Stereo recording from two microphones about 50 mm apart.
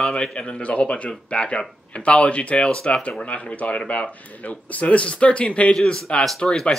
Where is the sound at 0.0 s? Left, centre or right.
Centre.